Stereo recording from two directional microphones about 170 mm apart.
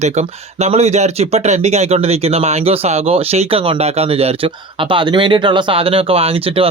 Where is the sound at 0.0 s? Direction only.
40° right (ahead or behind).